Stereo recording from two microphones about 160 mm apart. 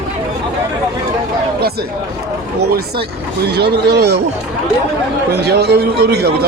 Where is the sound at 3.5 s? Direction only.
90° right.